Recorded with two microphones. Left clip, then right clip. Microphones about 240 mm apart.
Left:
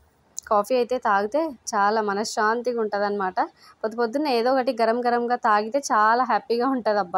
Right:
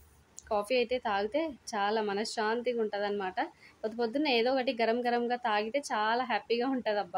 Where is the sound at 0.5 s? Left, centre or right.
Centre.